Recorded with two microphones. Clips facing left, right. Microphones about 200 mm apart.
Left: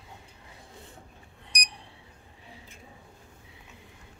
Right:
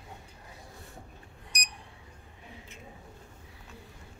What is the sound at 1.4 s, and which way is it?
Alarm clock, 30° left (ahead or behind).